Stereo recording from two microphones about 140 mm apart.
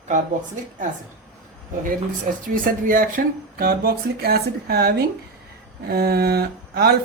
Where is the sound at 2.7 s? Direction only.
75° right (ahead or behind).